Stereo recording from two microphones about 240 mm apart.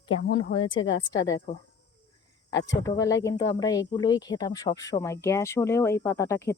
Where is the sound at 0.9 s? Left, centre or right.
Centre.